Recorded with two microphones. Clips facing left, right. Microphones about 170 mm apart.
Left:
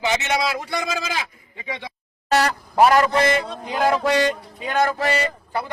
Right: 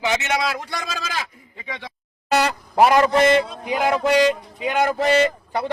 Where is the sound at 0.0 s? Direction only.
Centre (ahead or behind).